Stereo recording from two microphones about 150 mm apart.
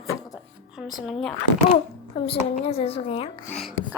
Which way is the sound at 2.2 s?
35° left (ahead or behind).